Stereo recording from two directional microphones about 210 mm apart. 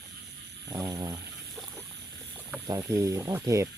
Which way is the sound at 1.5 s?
Centre (ahead or behind).